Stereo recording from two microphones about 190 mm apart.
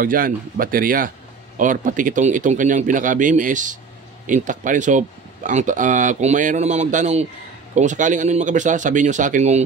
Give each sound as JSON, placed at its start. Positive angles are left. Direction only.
{"t": 0.0, "sound": "speech", "side_deg": -45}